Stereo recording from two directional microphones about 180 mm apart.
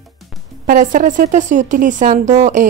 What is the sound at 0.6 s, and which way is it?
A woman's voice, 45° right (ahead or behind).